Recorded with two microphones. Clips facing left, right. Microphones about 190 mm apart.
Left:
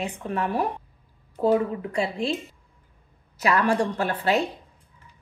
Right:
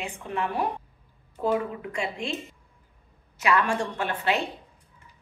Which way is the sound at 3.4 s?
40° left (ahead or behind).